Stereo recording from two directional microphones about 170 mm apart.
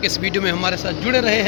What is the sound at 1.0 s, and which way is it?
Speech, 25° right (ahead or behind).